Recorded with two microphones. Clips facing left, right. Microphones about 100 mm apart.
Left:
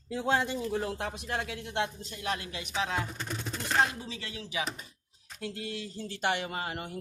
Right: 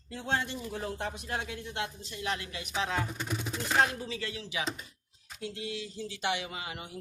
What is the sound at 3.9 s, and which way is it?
Speech, 25° left (ahead or behind).